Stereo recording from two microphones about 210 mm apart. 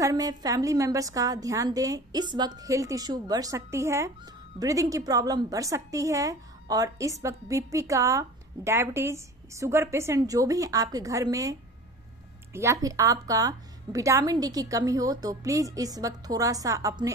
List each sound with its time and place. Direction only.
0.0 s a woman's voice: 15° right (ahead or behind)
12.5 s a woman's voice: 15° right (ahead or behind)